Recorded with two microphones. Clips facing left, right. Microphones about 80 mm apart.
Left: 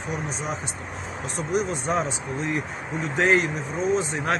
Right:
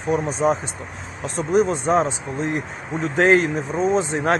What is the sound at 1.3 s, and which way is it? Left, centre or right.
Speech, right.